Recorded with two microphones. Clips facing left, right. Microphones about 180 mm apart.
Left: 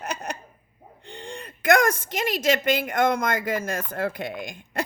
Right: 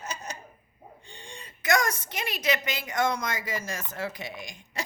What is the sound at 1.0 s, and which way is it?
A woman's voice, 60° left (ahead or behind).